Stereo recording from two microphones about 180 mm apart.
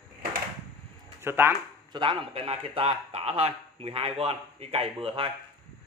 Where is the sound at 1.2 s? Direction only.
15° right (ahead or behind).